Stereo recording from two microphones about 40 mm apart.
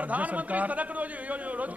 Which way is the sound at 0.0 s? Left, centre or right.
Right.